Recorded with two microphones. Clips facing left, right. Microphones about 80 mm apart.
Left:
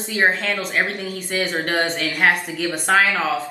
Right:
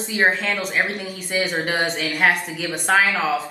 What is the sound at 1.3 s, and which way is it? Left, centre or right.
Speech, centre.